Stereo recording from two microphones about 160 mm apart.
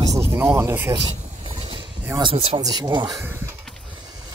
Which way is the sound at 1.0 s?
30° right (ahead or behind).